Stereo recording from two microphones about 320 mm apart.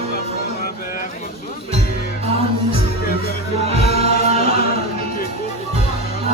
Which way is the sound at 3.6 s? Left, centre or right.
Centre.